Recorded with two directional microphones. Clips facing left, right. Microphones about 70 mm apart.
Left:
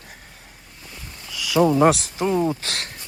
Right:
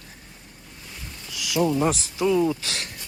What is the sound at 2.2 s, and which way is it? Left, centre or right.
Speech, left.